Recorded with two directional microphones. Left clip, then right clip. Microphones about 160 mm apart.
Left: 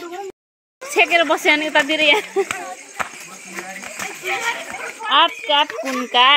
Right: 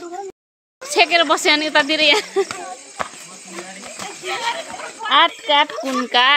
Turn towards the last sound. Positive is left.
turn(degrees=-10)  # may be behind; listen again after turning